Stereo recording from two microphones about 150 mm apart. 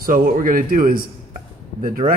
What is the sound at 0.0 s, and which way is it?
Speech, 65° right (ahead or behind).